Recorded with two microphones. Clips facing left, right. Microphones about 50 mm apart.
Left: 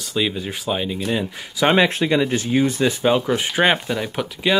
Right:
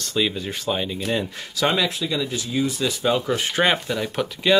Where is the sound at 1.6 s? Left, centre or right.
Left.